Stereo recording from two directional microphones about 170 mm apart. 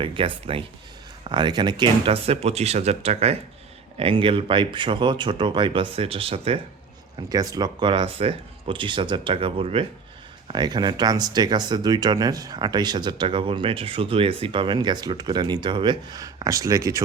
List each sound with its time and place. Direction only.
0.0 s speech: 30° right (ahead or behind)
7.2 s speech: 20° right (ahead or behind)